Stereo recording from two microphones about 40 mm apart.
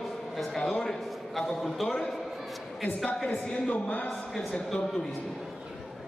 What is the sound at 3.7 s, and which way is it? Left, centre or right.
Speech, left.